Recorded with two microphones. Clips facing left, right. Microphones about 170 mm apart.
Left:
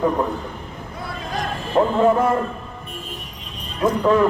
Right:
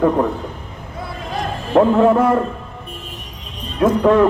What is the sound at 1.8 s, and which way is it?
Speech, 65° right (ahead or behind).